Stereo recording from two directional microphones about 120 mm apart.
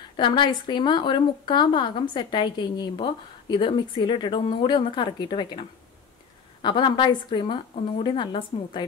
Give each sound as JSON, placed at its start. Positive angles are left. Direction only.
{"t": 0.2, "sound": "a woman's voice", "side_deg": 40}